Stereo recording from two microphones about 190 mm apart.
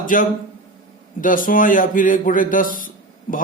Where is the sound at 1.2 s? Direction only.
45° left (ahead or behind).